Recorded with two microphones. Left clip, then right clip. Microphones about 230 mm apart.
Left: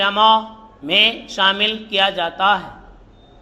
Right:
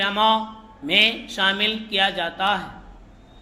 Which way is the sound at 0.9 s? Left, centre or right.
Right.